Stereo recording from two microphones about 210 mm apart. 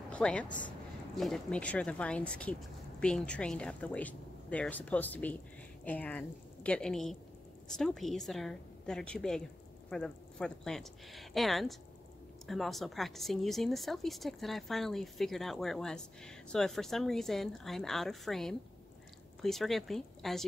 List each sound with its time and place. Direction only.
0.1 s a woman's voice: 5° left (ahead or behind)